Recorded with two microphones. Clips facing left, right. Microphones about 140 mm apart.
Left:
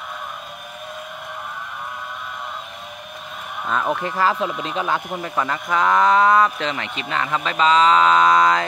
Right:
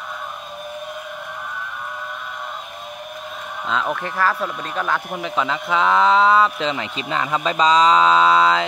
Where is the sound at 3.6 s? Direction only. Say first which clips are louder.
Left 1 dB; 15° left (ahead or behind).